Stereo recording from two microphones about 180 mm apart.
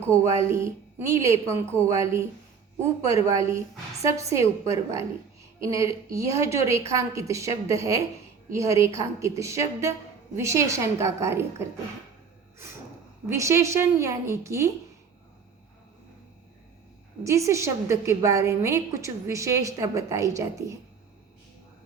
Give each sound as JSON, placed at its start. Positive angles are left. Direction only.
{"t": 0.2, "sound": "a woman's voice", "side_deg": -15}
{"t": 13.2, "sound": "a woman's voice", "side_deg": -15}
{"t": 17.2, "sound": "a woman's voice", "side_deg": -15}